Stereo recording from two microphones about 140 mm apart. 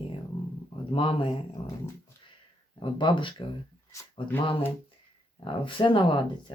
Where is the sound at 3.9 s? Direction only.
20° left (ahead or behind).